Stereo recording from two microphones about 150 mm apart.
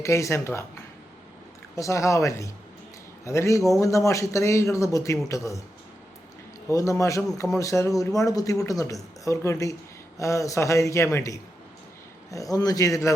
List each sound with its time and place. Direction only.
0.0 s speech: 20° left (ahead or behind)
1.7 s speech: 20° left (ahead or behind)
6.7 s speech: 20° left (ahead or behind)